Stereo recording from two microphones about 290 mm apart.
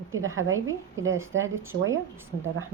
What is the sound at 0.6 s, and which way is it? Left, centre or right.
A woman's voice, right.